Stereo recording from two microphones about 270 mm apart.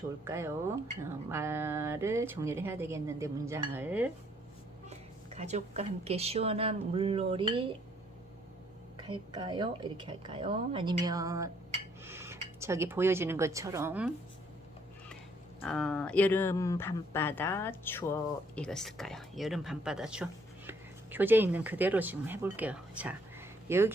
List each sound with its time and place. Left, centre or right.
0.3 s speech: centre
4.9 s speech: right
9.0 s speech: centre
15.6 s speech: centre